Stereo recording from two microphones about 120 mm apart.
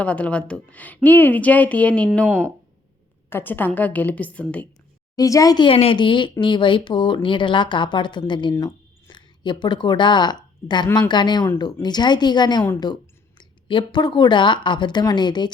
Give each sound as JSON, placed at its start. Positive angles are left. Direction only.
{"t": 0.0, "sound": "a woman's voice", "side_deg": 10}
{"t": 3.2, "sound": "a woman's voice", "side_deg": 20}
{"t": 5.1, "sound": "a woman's voice", "side_deg": 30}
{"t": 5.6, "sound": "speech", "side_deg": 50}